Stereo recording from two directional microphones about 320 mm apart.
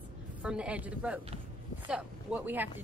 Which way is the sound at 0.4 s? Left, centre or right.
Centre.